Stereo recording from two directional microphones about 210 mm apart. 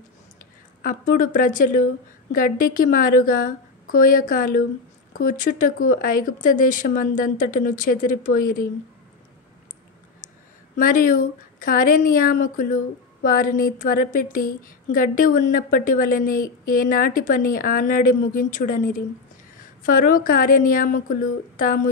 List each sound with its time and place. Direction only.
0.8 s a woman's voice: 40° left (ahead or behind)
10.8 s a woman's voice: 40° left (ahead or behind)